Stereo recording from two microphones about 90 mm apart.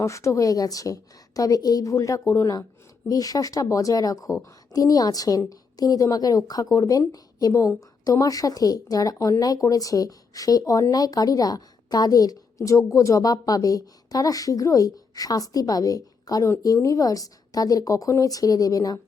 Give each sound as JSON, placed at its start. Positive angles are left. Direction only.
{"t": 0.0, "sound": "a woman's voice", "side_deg": 35}